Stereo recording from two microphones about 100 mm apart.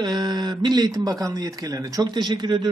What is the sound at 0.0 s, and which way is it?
Speech, 45° right (ahead or behind).